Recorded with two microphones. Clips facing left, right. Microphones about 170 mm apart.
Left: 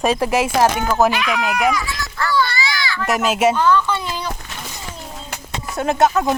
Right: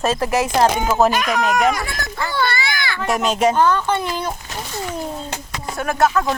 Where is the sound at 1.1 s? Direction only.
45° right (ahead or behind).